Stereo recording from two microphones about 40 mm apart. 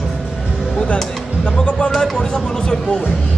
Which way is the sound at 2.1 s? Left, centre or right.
Centre.